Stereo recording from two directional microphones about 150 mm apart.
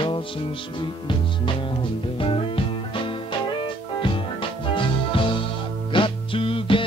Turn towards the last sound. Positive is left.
turn(degrees=35)  # may be behind; listen again after turning